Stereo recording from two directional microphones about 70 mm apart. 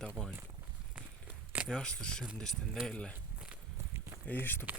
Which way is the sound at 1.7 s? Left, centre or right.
Centre.